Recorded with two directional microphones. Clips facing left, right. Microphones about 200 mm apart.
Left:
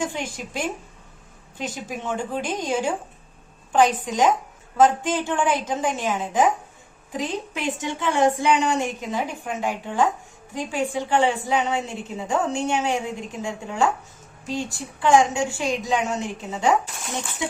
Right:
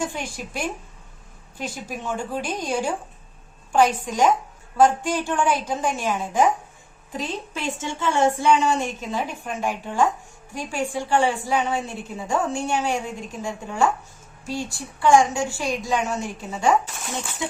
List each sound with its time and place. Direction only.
0.0 s a woman's voice: 20° left (ahead or behind)